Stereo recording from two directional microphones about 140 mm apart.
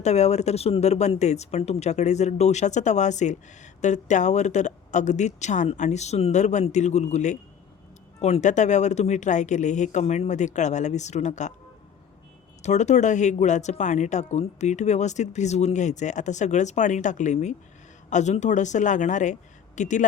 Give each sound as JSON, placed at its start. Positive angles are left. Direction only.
{"t": 0.0, "sound": "speech", "side_deg": 50}
{"t": 12.6, "sound": "speech", "side_deg": 55}